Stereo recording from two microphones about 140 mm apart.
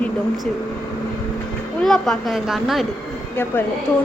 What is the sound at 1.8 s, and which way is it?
A woman's voice, 5° left (ahead or behind).